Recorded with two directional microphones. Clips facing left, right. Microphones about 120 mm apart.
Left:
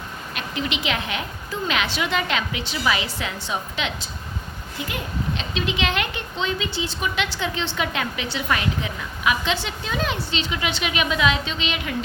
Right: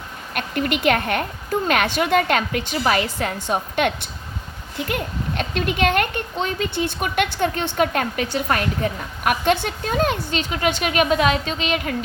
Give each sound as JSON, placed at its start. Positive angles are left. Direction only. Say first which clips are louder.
{"t": 0.3, "sound": "speech", "louder": "right 5 dB", "side_deg": -55}